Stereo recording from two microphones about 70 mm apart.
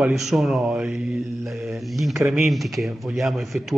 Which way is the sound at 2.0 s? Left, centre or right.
Centre.